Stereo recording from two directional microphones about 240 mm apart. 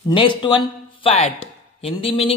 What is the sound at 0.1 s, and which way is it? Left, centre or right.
A man's voice, centre.